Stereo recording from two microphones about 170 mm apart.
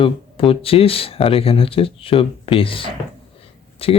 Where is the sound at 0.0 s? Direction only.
30° left (ahead or behind).